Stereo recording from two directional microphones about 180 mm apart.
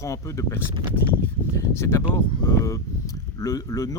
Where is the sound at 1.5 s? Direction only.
15° left (ahead or behind).